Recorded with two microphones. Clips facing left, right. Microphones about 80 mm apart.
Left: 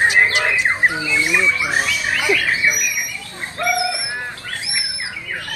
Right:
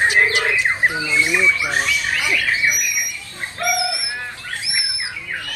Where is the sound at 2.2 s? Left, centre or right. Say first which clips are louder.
Left 3 dB; left.